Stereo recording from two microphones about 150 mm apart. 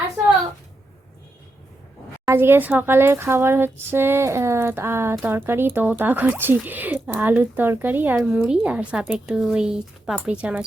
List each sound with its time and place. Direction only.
2.2 s speech: 15° right (ahead or behind)